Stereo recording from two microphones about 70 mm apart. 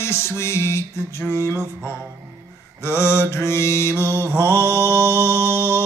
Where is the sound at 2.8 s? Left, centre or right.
Left.